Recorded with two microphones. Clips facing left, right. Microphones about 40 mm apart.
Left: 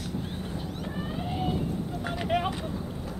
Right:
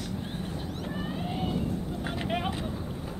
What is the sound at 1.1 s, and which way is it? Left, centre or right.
Vehicle, centre.